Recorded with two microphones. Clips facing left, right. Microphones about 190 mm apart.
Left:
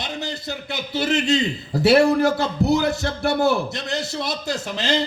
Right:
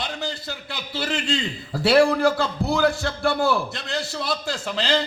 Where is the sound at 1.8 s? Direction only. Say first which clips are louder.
Left 2 dB; 20° left (ahead or behind).